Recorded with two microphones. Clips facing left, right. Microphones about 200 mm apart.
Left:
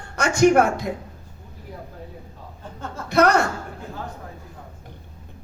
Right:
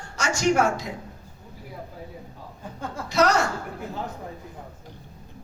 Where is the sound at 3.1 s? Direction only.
60° left (ahead or behind).